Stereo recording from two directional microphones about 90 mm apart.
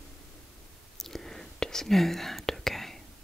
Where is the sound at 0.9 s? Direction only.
5° left (ahead or behind).